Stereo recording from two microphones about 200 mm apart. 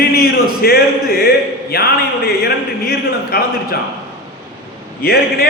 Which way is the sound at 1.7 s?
50° left (ahead or behind).